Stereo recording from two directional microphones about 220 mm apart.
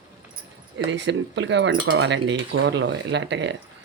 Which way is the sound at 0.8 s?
55° right (ahead or behind).